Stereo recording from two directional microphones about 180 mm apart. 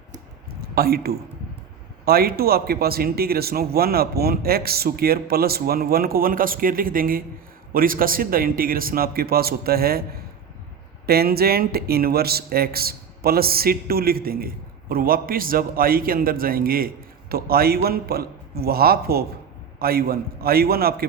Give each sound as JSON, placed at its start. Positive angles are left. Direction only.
{"t": 0.6, "sound": "a man's voice", "side_deg": -55}
{"t": 11.0, "sound": "speech", "side_deg": -60}